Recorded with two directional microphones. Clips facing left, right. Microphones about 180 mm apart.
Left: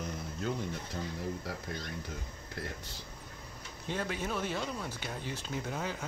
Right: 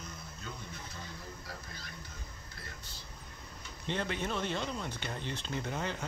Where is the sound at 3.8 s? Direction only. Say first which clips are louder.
Even; 5° left (ahead or behind).